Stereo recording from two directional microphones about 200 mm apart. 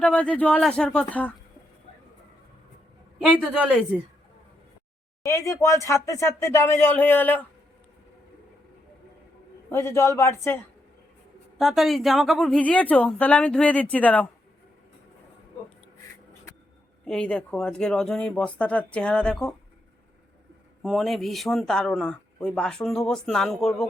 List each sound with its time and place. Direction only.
0.0 s speech: 5° left (ahead or behind)
3.2 s speech: centre (ahead or behind)
5.2 s speech: 15° left (ahead or behind)
9.7 s speech: 15° left (ahead or behind)
11.6 s speech: centre (ahead or behind)
17.1 s speech: 5° left (ahead or behind)
20.8 s speech: centre (ahead or behind)